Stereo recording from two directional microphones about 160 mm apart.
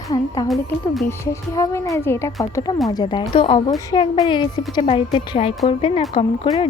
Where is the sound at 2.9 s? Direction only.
30° left (ahead or behind).